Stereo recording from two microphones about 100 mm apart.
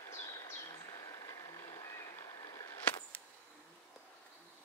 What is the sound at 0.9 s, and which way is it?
Music, 35° left (ahead or behind).